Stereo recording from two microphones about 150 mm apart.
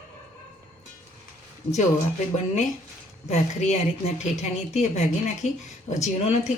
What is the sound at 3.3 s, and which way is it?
A woman's voice, 45° left (ahead or behind).